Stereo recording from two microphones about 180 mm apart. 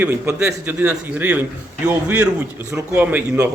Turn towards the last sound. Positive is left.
turn(degrees=-10)  # may be behind; listen again after turning